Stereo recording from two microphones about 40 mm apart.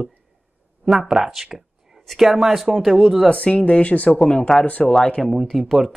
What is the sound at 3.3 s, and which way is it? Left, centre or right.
Speech, left.